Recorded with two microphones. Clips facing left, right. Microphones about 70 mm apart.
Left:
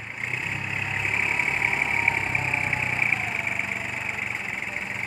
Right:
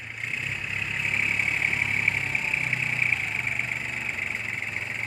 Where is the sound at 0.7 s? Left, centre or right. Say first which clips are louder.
Left 1 dB; centre.